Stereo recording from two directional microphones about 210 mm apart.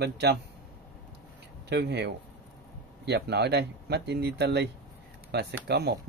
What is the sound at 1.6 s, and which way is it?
Speech, 55° right (ahead or behind).